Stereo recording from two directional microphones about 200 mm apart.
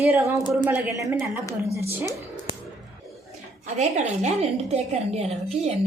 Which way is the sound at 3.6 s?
35° right (ahead or behind).